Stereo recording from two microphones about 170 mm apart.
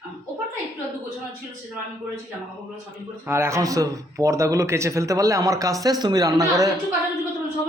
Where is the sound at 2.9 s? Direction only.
15° right (ahead or behind).